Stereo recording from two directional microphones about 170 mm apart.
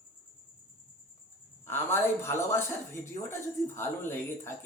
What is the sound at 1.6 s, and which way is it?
A woman's voice, 15° left (ahead or behind).